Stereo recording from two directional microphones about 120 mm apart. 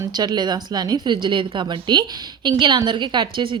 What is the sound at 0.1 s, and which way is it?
A woman's voice, 35° right (ahead or behind).